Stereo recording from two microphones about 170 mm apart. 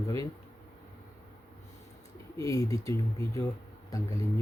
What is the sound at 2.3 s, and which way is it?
Speech, 20° left (ahead or behind).